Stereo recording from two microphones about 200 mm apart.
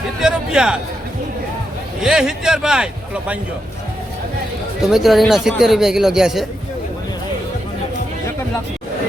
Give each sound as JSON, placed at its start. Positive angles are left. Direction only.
{"t": 0.2, "sound": "a sound", "side_deg": -5}
{"t": 2.0, "sound": "a man's voice", "side_deg": -5}
{"t": 4.8, "sound": "a man's voice", "side_deg": 0}